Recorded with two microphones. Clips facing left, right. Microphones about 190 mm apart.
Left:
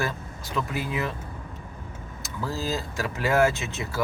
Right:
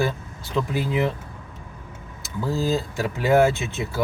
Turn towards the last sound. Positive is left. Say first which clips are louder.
# right 4 dB
turn(degrees=-30)  # may be behind; listen again after turning